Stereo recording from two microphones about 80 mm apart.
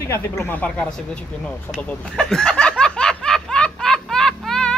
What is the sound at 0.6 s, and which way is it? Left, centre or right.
Speech, centre.